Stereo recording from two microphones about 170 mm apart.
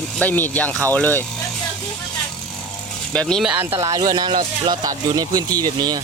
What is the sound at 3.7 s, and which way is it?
Speech, 20° right (ahead or behind).